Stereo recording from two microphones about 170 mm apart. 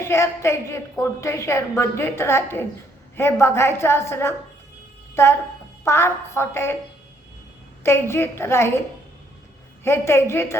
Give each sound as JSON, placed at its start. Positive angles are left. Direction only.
{"t": 0.0, "sound": "a woman's voice", "side_deg": 15}
{"t": 7.9, "sound": "a woman's voice", "side_deg": 15}
{"t": 9.8, "sound": "a woman's voice", "side_deg": 15}